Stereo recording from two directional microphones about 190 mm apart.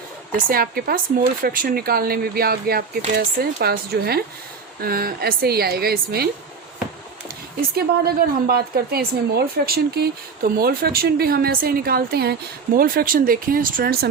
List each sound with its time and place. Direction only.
0.3 s a woman's voice: 50° right (ahead or behind)
7.8 s a woman's voice: 55° right (ahead or behind)